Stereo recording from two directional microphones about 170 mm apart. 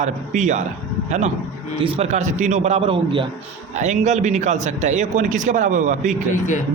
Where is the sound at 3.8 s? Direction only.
40° right (ahead or behind).